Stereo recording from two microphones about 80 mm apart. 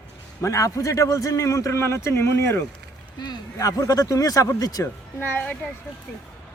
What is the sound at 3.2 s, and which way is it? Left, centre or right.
Speech, left.